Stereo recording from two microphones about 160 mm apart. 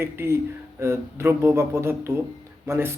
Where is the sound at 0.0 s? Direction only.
15° right (ahead or behind).